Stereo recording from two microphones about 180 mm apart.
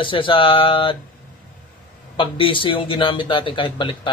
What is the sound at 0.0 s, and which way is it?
Speech, 30° left (ahead or behind).